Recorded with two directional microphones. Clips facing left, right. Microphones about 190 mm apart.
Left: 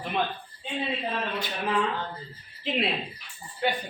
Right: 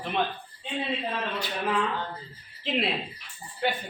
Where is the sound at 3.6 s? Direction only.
Centre (ahead or behind).